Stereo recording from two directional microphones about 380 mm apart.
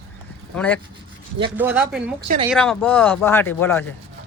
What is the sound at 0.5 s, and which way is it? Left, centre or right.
Speech, centre.